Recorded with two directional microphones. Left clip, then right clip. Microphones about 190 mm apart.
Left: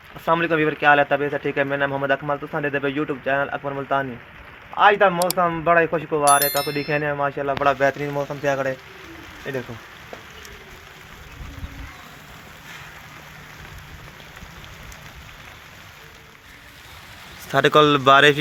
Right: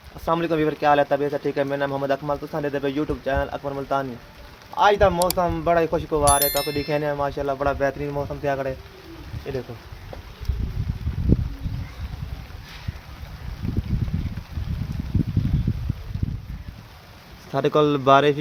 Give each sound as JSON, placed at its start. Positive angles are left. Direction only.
{"t": 0.3, "sound": "speech", "side_deg": 0}
{"t": 7.6, "sound": "speech", "side_deg": 25}
{"t": 17.5, "sound": "speech", "side_deg": 5}